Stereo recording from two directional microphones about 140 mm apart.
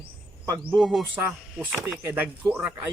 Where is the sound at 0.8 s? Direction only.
Centre (ahead or behind).